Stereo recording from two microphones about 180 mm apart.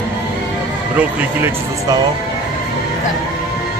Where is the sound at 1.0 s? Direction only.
15° right (ahead or behind).